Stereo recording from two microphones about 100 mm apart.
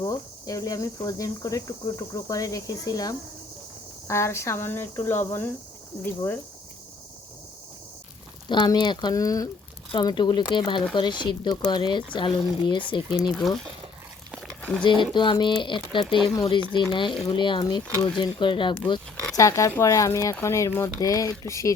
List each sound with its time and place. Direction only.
0.0 s speech: 35° left (ahead or behind); by 6.4 s 20° left (ahead or behind)
8.4 s speech: 45° left (ahead or behind)
14.4 s a sound: 5° left (ahead or behind)
14.8 s speech: 55° left (ahead or behind)
19.4 s speech: 30° left (ahead or behind)